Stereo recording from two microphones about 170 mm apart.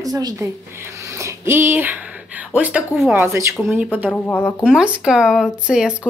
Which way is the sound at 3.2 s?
15° right (ahead or behind).